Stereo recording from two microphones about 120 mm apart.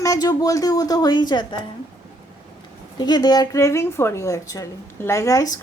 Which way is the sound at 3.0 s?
35° left (ahead or behind).